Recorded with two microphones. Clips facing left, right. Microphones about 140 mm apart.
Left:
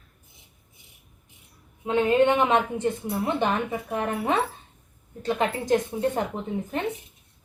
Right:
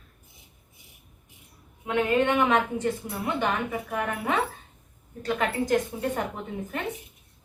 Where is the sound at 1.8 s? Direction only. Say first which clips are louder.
Left 4 dB; 25° left (ahead or behind).